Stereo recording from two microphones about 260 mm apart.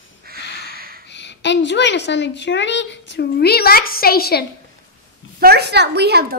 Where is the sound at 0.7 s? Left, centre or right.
Right.